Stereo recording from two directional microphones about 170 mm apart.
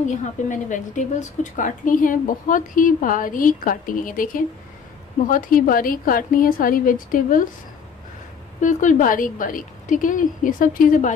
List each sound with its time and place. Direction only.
0.0 s a woman's voice: 45° left (ahead or behind)
8.5 s a woman's voice: 50° left (ahead or behind)